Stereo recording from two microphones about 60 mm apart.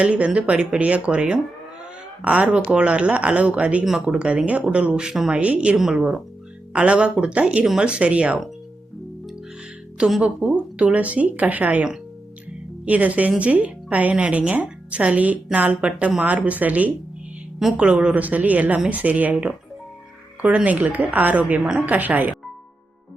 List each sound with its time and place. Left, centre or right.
0.0 s speech: centre
1.8 s a sound: right
2.6 s speech: centre
5.3 s speech: right
5.7 s speech: centre
10.2 s speech: centre
20.7 s speech: right
21.6 s speech: centre
21.8 s speech: right